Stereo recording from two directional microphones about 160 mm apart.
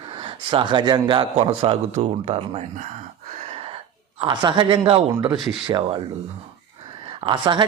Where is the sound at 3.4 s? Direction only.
40° right (ahead or behind).